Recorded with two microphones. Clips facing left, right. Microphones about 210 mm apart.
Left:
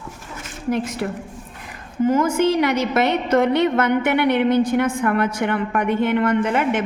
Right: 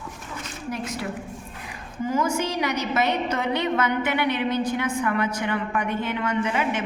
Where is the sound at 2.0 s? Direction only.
55° left (ahead or behind).